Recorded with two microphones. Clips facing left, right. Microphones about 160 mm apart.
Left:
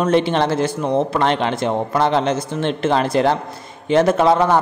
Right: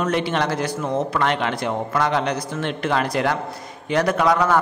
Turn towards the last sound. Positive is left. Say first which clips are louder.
# left 4 dB
turn(degrees=25)  # may be behind; listen again after turning